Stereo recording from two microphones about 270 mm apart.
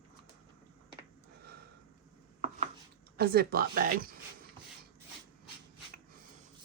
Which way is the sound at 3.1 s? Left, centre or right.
Right.